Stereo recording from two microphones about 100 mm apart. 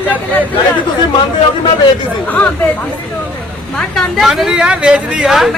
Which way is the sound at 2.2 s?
15° left (ahead or behind).